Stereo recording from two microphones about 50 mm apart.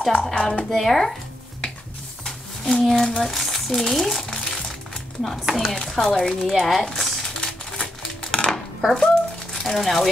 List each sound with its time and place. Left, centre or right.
0.1 s speech: centre
2.2 s a sound: centre
2.8 s speech: centre
4.2 s crumpling: centre
5.5 s speech: centre
5.8 s speech: centre
6.6 s a sound: centre
7.2 s music: centre
8.2 s dishes: centre
8.9 s babbling: centre
9.6 s speech: centre